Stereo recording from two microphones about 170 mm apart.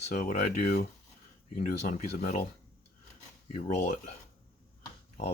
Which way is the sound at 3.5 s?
40° left (ahead or behind).